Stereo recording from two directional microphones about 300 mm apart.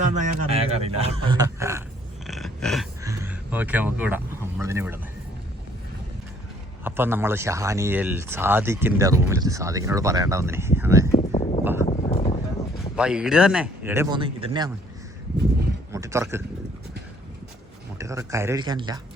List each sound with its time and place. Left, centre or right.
0.2 s speech: centre
2.2 s a sound: centre
6.8 s speech: centre
11.1 s a sound: left
13.0 s a man's voice: centre
15.9 s speech: centre
17.9 s speech: centre